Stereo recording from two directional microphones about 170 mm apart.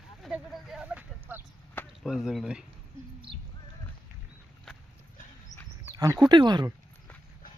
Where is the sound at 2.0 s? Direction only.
Centre (ahead or behind).